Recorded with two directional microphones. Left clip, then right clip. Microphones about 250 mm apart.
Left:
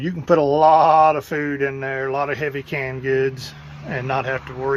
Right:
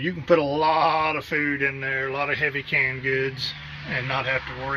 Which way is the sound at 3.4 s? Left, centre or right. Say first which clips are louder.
Right 5 dB; left.